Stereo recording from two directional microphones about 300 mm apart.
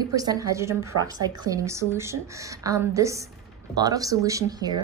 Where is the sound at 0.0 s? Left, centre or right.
Centre.